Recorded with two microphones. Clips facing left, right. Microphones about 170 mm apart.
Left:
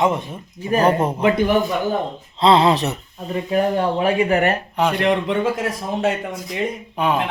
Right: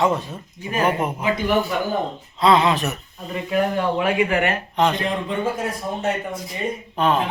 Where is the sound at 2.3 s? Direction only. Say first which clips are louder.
Left 2 dB; 30° left (ahead or behind).